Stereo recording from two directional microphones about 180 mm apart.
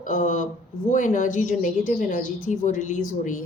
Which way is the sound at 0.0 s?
45° left (ahead or behind).